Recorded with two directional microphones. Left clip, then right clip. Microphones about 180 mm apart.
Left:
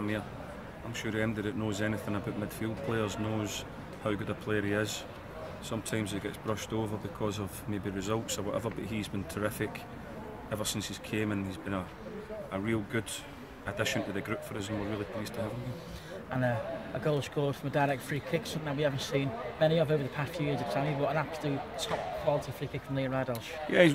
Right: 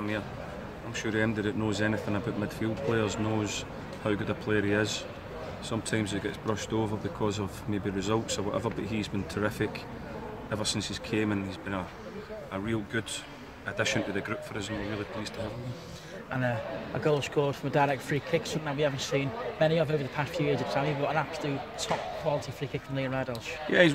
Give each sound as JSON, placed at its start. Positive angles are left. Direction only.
{"t": 0.9, "sound": "speech", "side_deg": 0}
{"t": 16.3, "sound": "a sound", "side_deg": -35}
{"t": 17.0, "sound": "speech", "side_deg": -30}